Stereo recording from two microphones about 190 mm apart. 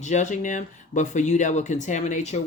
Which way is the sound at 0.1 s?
40° left (ahead or behind).